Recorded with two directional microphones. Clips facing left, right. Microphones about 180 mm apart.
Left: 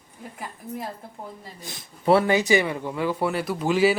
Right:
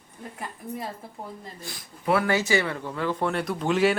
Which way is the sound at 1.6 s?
20° left (ahead or behind).